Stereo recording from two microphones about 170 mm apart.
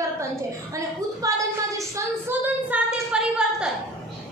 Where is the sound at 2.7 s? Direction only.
5° right (ahead or behind).